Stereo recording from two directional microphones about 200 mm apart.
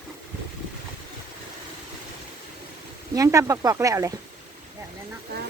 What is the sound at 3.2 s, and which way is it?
Speech, 15° right (ahead or behind).